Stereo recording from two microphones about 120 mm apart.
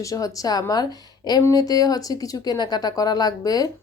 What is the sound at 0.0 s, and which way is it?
A woman's voice, 30° left (ahead or behind).